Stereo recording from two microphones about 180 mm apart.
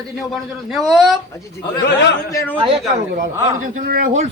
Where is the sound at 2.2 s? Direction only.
15° left (ahead or behind).